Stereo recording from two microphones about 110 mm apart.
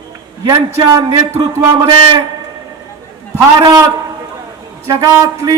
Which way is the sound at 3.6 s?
40° right (ahead or behind).